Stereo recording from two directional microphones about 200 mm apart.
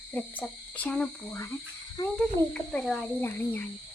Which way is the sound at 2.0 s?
20° left (ahead or behind).